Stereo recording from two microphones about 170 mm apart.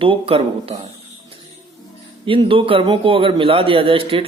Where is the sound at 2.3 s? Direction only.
30° right (ahead or behind).